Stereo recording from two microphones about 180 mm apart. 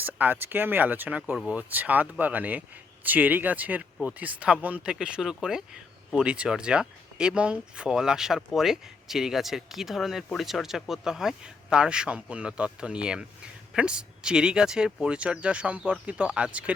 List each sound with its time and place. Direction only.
0.0 s speech: 10° right (ahead or behind)